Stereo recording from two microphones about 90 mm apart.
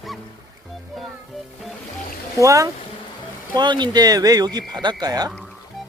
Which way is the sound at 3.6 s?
55° right (ahead or behind).